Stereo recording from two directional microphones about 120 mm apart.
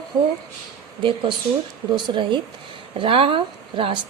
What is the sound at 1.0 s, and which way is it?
A woman's voice, 45° right (ahead or behind).